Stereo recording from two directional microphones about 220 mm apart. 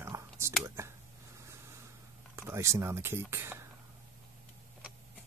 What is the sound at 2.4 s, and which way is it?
Speech, 10° right (ahead or behind).